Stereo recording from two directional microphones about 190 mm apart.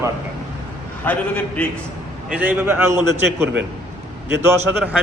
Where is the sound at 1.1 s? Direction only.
10° left (ahead or behind).